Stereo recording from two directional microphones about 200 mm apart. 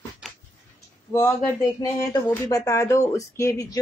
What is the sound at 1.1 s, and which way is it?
Speech, 15° left (ahead or behind).